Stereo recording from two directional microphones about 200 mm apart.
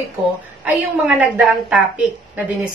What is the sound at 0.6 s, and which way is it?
A woman's voice, 5° right (ahead or behind).